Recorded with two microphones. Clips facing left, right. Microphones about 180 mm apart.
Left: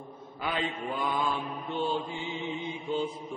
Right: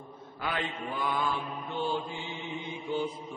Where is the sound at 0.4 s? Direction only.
20° left (ahead or behind).